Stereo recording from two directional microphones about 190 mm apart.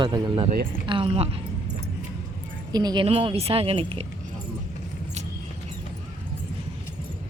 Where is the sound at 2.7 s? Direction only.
20° right (ahead or behind).